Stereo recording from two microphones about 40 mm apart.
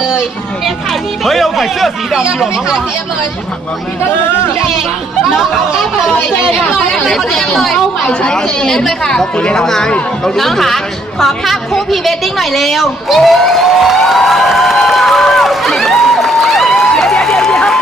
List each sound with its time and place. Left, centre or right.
1.2 s a woman's voice: centre
6.9 s a woman's voice: centre
8.2 s a woman's voice: left; by 14.8 s centre
14.8 s a sound: centre